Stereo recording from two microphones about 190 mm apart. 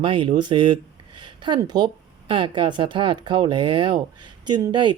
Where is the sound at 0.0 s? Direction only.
25° right (ahead or behind).